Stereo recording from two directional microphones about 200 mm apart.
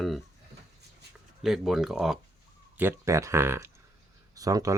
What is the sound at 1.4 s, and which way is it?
Speech, centre (ahead or behind).